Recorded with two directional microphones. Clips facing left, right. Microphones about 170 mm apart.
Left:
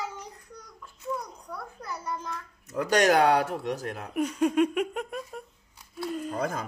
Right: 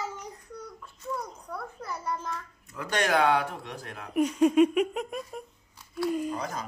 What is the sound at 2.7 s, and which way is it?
Speech, 40° left (ahead or behind).